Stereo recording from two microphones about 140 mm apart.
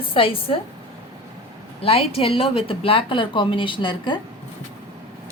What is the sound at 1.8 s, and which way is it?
A woman's voice, 45° left (ahead or behind).